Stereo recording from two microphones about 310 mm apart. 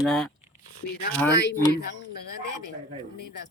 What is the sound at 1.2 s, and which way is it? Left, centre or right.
Speech, left.